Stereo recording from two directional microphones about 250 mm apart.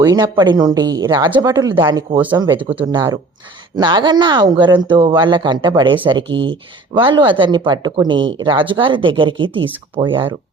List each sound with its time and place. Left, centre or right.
0.0 s speech: centre
6.2 s speech: right
6.5 s speech: centre
9.7 s speech: centre